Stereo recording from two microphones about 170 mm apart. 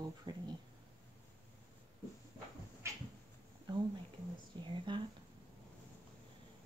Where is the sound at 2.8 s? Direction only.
15° right (ahead or behind).